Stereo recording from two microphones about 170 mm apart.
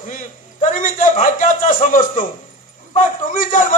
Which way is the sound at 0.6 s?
50° left (ahead or behind).